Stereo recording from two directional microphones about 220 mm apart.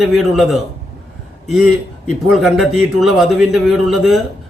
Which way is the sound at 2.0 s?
Centre (ahead or behind).